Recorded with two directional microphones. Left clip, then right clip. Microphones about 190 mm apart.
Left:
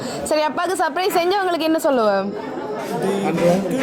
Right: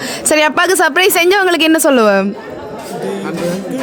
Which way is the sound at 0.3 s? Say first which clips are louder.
Right 9 dB; 60° right (ahead or behind).